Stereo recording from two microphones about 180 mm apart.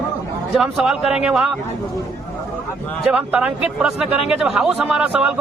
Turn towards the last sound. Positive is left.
turn(degrees=-5)  # may be behind; listen again after turning